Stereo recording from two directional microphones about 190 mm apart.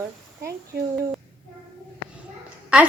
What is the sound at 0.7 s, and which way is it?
Speech, 60° right (ahead or behind).